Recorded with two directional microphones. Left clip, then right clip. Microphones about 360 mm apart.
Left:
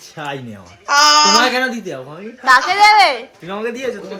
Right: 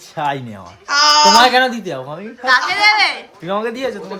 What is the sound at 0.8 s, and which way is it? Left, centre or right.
Speech, centre.